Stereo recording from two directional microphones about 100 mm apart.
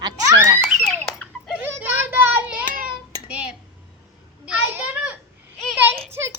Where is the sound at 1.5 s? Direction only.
15° right (ahead or behind).